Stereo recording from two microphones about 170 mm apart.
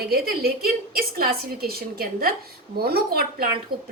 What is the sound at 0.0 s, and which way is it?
A woman's voice, 65° right (ahead or behind).